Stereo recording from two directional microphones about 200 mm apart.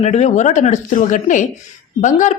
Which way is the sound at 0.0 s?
35° left (ahead or behind).